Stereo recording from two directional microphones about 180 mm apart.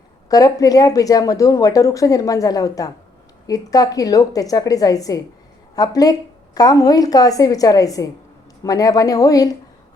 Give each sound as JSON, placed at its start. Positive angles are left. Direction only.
{"t": 0.3, "sound": "speech", "side_deg": 20}